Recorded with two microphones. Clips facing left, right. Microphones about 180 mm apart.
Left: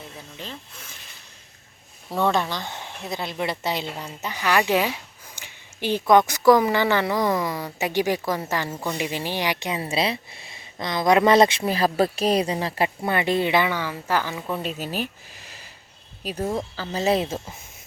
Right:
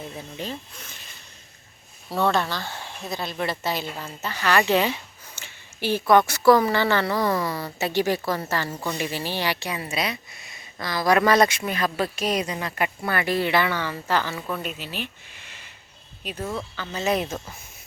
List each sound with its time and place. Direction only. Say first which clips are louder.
0.4 s speech: right 5 dB; 15° right (ahead or behind)
2.0 s speech: even; 15° left (ahead or behind)
14.6 s speech: left 4 dB; 40° left (ahead or behind)